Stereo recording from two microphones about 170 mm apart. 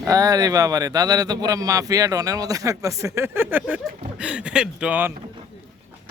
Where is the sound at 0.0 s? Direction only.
20° right (ahead or behind).